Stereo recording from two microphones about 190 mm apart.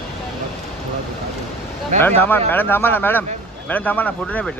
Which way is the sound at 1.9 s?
10° left (ahead or behind).